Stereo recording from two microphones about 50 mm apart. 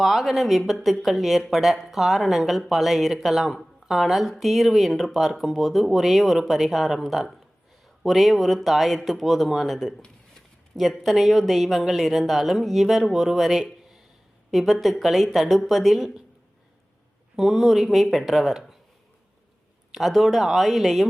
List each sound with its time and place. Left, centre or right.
0.0 s speech: centre
17.3 s speech: centre
19.9 s speech: centre